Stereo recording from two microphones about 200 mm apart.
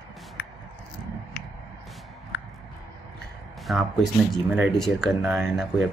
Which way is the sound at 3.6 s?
Centre (ahead or behind).